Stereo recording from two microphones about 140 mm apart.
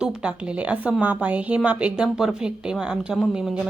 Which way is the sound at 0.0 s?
5° right (ahead or behind).